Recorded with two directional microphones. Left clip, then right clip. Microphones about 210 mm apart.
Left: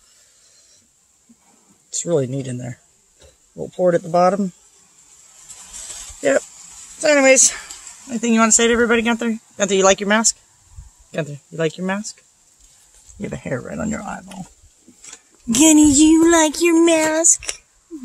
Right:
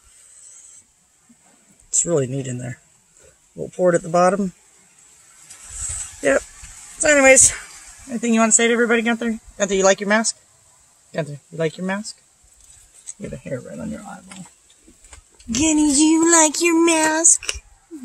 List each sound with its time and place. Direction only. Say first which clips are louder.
1.9 s speech: even; 5° left (ahead or behind)
7.0 s speech: even; 5° left (ahead or behind)
13.2 s speech: left 4 dB; 30° left (ahead or behind)
15.5 s speech: left 5 dB; 25° left (ahead or behind); by 17.3 s centre (ahead or behind)